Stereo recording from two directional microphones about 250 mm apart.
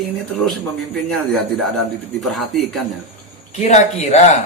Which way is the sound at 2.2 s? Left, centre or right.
Centre.